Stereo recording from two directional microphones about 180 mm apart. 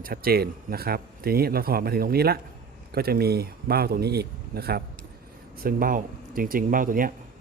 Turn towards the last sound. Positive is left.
turn(degrees=-50)  # may be behind; listen again after turning